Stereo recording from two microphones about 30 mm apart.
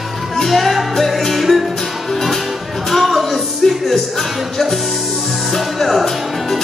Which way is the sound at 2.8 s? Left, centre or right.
Centre.